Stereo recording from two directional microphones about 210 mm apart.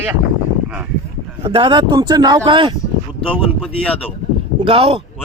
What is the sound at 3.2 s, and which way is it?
Speech, 5° left (ahead or behind).